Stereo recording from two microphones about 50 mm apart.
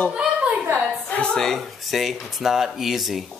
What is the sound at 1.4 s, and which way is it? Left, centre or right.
Speech, centre.